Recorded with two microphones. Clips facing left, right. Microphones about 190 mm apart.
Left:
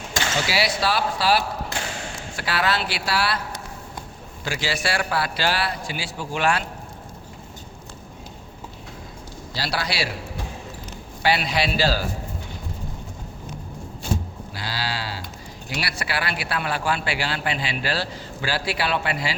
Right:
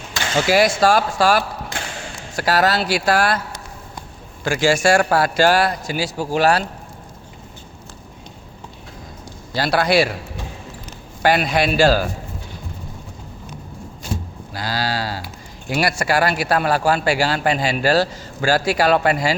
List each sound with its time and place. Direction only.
0.4 s a man's voice: 50° right (ahead or behind)
4.4 s a man's voice: 50° right (ahead or behind)
9.5 s a man's voice: 50° right (ahead or behind)
11.2 s a man's voice: 50° right (ahead or behind)
14.5 s livestock: 45° right (ahead or behind)
15.7 s a man's voice: 45° right (ahead or behind)